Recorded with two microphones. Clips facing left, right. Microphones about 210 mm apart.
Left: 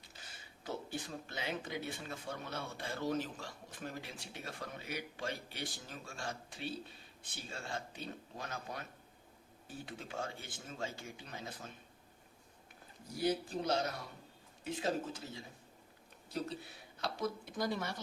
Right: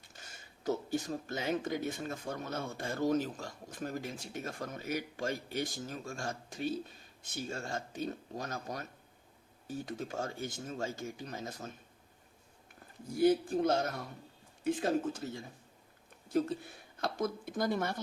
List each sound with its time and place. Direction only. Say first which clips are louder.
0.1 s speech: right 3 dB; 45° right (ahead or behind)
13.1 s speech: right 8 dB; 50° right (ahead or behind)